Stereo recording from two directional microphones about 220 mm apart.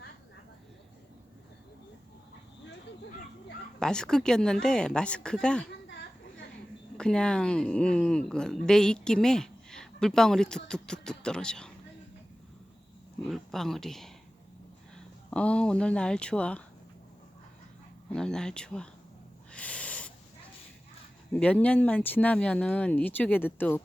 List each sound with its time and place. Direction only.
3.8 s speech: 5° left (ahead or behind)
5.9 s a sound: 55° left (ahead or behind)
6.9 s speech: 5° left (ahead or behind)
13.2 s speech: centre (ahead or behind)
18.1 s speech: 5° left (ahead or behind)
19.5 s a sound: 5° left (ahead or behind)
21.3 s speech: 5° left (ahead or behind)